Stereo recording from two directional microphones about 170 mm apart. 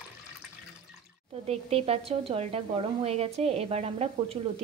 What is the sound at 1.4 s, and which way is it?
Speech, 35° right (ahead or behind).